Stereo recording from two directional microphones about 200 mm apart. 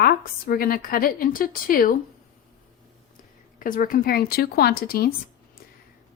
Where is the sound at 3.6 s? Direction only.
45° left (ahead or behind).